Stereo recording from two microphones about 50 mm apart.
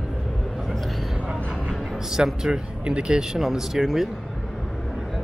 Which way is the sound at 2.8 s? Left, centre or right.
Right.